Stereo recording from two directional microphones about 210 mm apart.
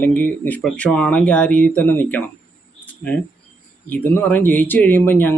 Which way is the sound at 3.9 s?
10° left (ahead or behind).